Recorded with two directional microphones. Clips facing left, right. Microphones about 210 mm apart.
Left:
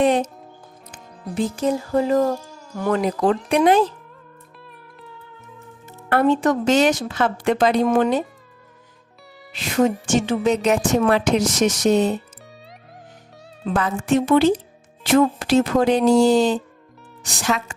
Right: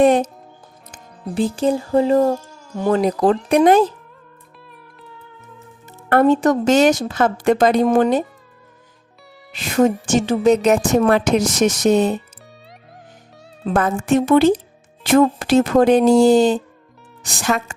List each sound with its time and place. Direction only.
1.5 s speech: 30° right (ahead or behind)
3.0 s speech: 35° right (ahead or behind)
6.1 s speech: 45° right (ahead or behind)
9.5 s speech: 50° right (ahead or behind)
13.7 s speech: 50° right (ahead or behind)